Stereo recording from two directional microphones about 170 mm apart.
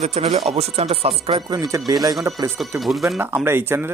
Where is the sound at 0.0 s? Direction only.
40° right (ahead or behind).